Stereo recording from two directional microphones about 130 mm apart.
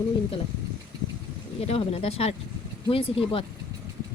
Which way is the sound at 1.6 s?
50° left (ahead or behind).